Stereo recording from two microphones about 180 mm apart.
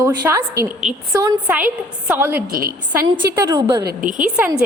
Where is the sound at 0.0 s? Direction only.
15° right (ahead or behind).